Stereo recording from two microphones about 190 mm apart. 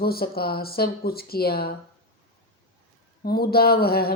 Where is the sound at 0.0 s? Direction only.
55° left (ahead or behind).